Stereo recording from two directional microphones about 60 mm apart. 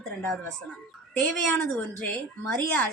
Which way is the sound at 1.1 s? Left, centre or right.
Left.